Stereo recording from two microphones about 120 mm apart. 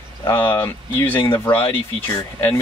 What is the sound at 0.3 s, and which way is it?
Speech, 20° left (ahead or behind).